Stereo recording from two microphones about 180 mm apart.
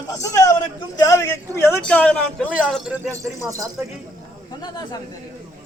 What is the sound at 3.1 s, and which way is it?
Speech, 15° right (ahead or behind).